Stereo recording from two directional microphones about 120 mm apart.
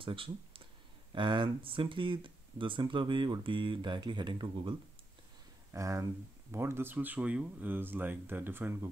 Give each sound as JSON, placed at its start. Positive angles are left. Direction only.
{"t": 0.0, "sound": "speech", "side_deg": -50}
{"t": 5.7, "sound": "speech", "side_deg": -25}